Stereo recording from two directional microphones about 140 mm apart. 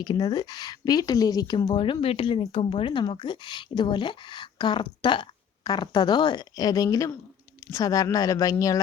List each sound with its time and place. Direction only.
0.0 s a woman's voice: 30° left (ahead or behind)